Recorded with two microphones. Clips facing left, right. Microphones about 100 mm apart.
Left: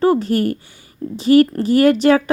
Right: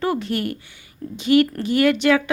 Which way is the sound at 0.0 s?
35° left (ahead or behind).